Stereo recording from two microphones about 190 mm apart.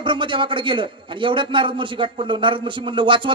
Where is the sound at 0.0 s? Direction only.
25° right (ahead or behind).